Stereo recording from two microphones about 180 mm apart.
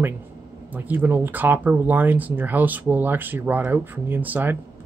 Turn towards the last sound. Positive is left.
turn(degrees=-10)  # may be behind; listen again after turning